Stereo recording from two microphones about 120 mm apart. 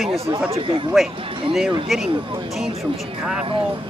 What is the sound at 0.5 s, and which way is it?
Speech, 45° right (ahead or behind).